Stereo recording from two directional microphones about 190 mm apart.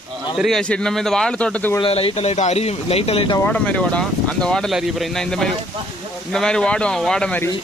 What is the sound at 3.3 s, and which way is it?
Speech, 10° left (ahead or behind).